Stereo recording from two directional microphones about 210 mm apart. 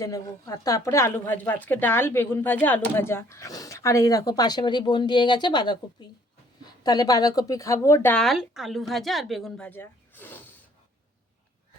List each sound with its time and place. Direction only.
0.0 s speech: 15° left (ahead or behind)